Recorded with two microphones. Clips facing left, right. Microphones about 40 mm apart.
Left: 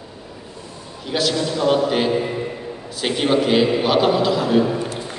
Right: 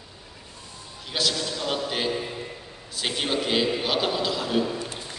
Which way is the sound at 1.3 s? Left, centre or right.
Centre.